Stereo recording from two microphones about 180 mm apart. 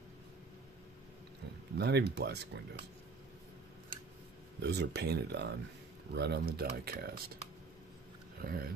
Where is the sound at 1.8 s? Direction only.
65° right (ahead or behind).